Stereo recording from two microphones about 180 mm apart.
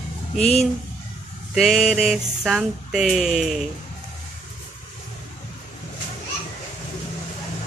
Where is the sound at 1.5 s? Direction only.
Centre (ahead or behind).